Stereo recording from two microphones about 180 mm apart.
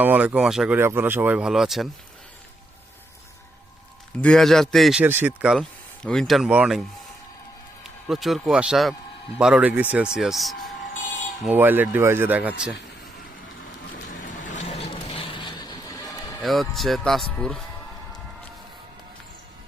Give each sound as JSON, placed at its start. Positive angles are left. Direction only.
{"t": 0.0, "sound": "speech", "side_deg": -10}
{"t": 4.2, "sound": "speech", "side_deg": 5}
{"t": 7.9, "sound": "a man's voice", "side_deg": 0}
{"t": 11.4, "sound": "speech", "side_deg": -10}
{"t": 14.4, "sound": "vehicle", "side_deg": 40}
{"t": 16.4, "sound": "speech", "side_deg": 0}